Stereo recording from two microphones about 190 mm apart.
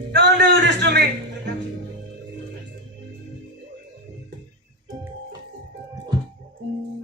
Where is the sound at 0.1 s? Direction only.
55° right (ahead or behind).